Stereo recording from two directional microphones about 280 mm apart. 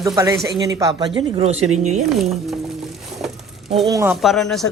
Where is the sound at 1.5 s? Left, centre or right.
Right.